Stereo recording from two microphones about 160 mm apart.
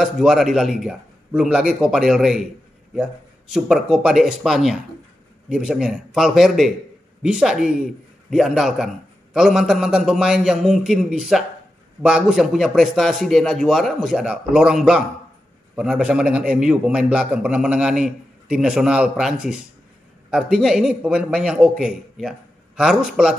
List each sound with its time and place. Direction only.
0.0 s a man's voice: centre (ahead or behind)
3.5 s a man's voice: centre (ahead or behind)